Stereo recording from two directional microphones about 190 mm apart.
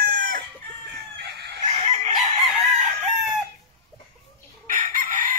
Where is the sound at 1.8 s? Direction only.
30° right (ahead or behind).